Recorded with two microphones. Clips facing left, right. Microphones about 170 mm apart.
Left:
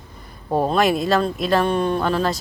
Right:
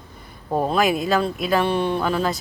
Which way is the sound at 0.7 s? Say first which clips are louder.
Left 1 dB; centre (ahead or behind).